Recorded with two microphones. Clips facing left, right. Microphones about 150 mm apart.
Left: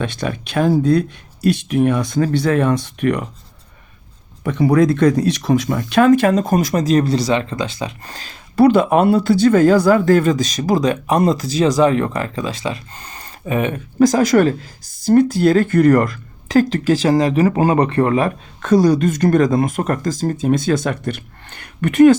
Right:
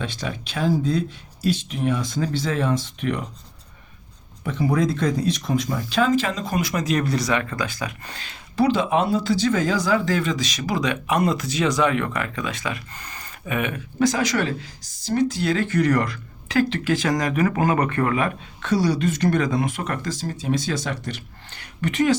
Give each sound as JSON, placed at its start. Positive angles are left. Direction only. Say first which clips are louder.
{"t": 0.0, "sound": "speech", "louder": "left 7 dB", "side_deg": 60}
{"t": 4.4, "sound": "speech", "louder": "left 8 dB", "side_deg": 70}
{"t": 8.1, "sound": "speech", "louder": "left 3 dB", "side_deg": 40}
{"t": 8.5, "sound": "speech", "louder": "left 7 dB", "side_deg": 55}